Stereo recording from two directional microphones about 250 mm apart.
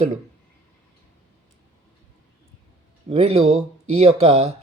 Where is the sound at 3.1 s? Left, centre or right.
Right.